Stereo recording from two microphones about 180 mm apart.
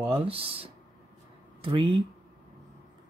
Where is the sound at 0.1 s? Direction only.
30° right (ahead or behind).